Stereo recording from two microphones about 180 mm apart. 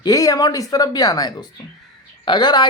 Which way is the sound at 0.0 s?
20° left (ahead or behind).